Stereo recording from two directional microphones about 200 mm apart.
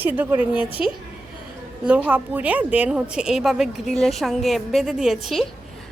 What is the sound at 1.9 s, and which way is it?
A woman's voice, 5° right (ahead or behind).